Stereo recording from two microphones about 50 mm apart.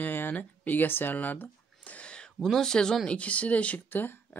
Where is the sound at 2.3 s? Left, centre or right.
Centre.